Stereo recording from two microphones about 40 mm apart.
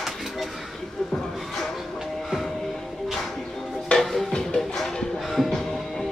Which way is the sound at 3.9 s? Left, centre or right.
Left.